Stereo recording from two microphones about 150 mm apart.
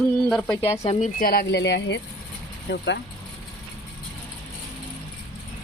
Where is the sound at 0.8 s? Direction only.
45° left (ahead or behind).